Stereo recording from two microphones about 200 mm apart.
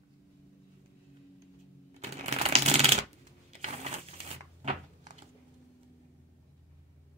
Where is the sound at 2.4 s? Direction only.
30° right (ahead or behind).